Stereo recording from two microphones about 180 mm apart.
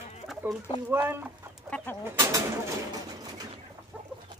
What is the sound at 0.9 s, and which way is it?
Speech, 10° right (ahead or behind).